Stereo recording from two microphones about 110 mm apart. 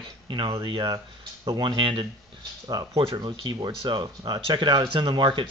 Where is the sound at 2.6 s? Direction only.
40° right (ahead or behind).